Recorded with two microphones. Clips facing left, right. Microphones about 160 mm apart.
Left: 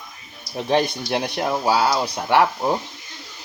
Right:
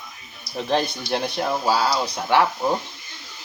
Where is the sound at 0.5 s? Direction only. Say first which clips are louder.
Left 3 dB; 10° left (ahead or behind).